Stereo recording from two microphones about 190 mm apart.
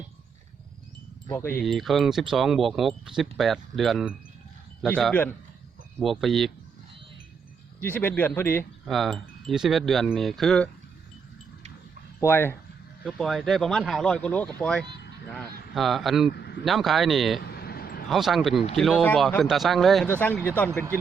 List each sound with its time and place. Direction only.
1.3 s speech: 10° left (ahead or behind)
1.6 s speech: centre (ahead or behind)
7.8 s speech: 10° left (ahead or behind)
8.9 s speech: centre (ahead or behind)
12.2 s speech: 10° left (ahead or behind)
13.1 s speech: centre (ahead or behind)
16.3 s a man's voice: 60° left (ahead or behind)
16.6 s speech: centre (ahead or behind)
17.4 s vehicle: 55° left (ahead or behind)
18.1 s speech: centre (ahead or behind)